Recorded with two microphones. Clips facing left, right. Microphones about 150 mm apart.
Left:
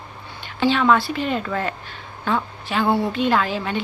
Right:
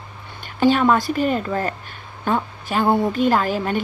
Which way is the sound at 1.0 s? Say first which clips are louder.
Right 3 dB; 45° right (ahead or behind).